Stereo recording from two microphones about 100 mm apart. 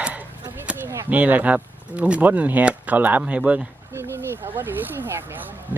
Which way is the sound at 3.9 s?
25° right (ahead or behind).